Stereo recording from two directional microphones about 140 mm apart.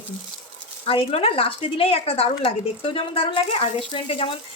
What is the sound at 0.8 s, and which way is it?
A woman's voice, 45° left (ahead or behind).